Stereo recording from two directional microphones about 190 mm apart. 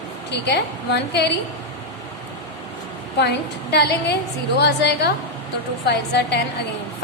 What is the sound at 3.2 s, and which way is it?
A woman's voice, 60° left (ahead or behind).